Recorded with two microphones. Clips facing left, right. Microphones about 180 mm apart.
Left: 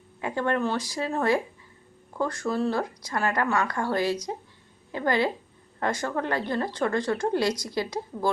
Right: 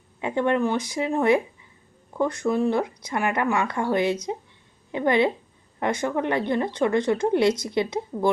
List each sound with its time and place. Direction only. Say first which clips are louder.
0.2 s a woman's voice: right 4 dB; 20° right (ahead or behind)